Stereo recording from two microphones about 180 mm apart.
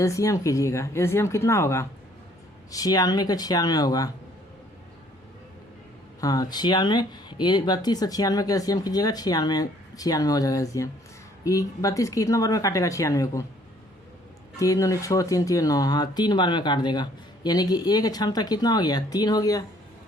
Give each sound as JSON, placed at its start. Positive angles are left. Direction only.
{"t": 0.0, "sound": "speech", "side_deg": 15}
{"t": 6.1, "sound": "speech", "side_deg": 20}
{"t": 14.5, "sound": "speech", "side_deg": 15}